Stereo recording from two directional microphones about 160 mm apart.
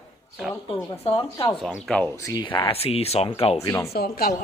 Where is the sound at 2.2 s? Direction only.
25° left (ahead or behind).